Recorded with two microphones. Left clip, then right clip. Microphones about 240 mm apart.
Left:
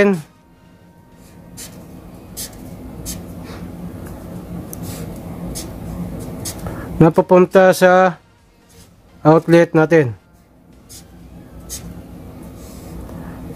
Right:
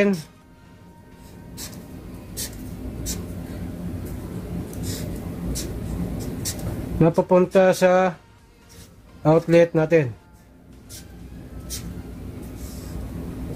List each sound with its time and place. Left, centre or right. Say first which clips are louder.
7.0 s speech: left 6 dB; left
9.2 s speech: left 5 dB; left